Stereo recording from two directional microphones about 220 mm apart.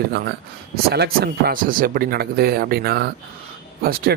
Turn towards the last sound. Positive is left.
turn(degrees=-45)  # may be behind; listen again after turning